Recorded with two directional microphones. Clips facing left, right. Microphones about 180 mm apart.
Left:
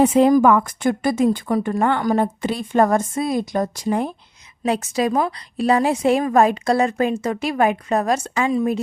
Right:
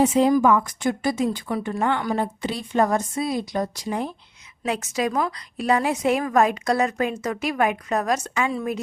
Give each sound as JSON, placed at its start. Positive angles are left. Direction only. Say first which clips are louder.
{"t": 0.0, "sound": "a woman's voice", "louder": "left 4 dB", "side_deg": 55}
{"t": 4.6, "sound": "a woman's voice", "louder": "left 4 dB", "side_deg": 35}